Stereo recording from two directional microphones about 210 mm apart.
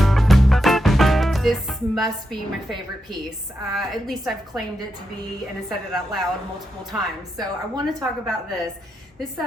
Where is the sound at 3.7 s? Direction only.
Centre (ahead or behind).